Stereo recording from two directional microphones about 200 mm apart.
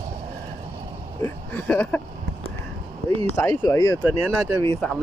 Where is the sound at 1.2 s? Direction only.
10° left (ahead or behind).